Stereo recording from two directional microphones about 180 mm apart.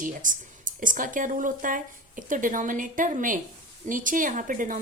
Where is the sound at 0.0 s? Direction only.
45° right (ahead or behind).